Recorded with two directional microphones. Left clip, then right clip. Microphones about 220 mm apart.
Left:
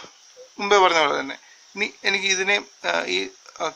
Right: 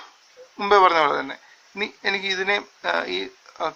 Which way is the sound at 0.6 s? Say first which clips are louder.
Right 1 dB; 40° left (ahead or behind).